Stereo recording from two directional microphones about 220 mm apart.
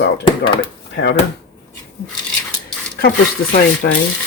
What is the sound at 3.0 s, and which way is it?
Speech, 45° left (ahead or behind).